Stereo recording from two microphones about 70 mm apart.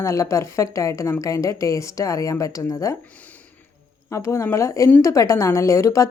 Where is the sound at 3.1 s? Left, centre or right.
Left.